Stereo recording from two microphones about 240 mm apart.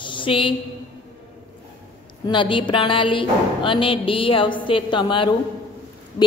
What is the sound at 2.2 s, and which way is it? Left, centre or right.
A man's voice, centre.